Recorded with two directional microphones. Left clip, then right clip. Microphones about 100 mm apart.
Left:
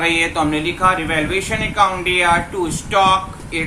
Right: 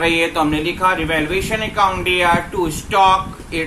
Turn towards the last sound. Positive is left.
turn(degrees=-20)  # may be behind; listen again after turning